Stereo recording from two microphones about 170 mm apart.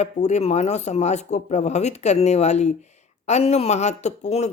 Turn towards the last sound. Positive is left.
turn(degrees=40)  # may be behind; listen again after turning